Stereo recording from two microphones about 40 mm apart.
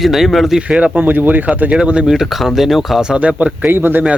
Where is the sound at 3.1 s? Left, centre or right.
Right.